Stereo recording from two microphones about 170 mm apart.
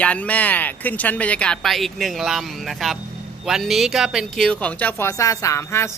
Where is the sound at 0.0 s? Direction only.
10° left (ahead or behind).